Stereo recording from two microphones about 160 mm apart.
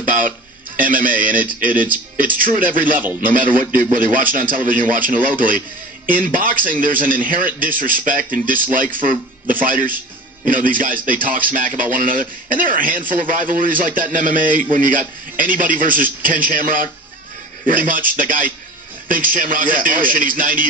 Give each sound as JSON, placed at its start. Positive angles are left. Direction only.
{"t": 0.0, "sound": "music", "side_deg": -55}
{"t": 0.7, "sound": "speech", "side_deg": -60}